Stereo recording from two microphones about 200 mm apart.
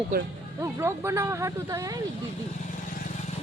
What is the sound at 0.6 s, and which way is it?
Speech, 15° right (ahead or behind).